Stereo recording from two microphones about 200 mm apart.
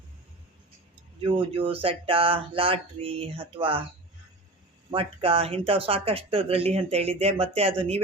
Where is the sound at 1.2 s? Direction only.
25° right (ahead or behind).